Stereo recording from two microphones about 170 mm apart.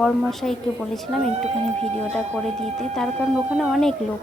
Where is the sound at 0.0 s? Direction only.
Centre (ahead or behind).